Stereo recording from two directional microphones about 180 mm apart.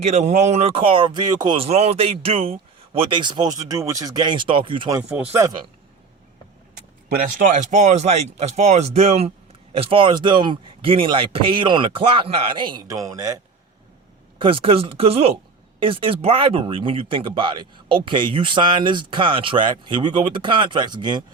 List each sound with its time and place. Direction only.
0.0 s speech: 40° right (ahead or behind); by 5.0 s 25° right (ahead or behind)
5.0 s speech: 10° right (ahead or behind)
7.3 s speech: 45° right (ahead or behind); by 13.3 s 20° right (ahead or behind)
14.3 s speech: 30° right (ahead or behind)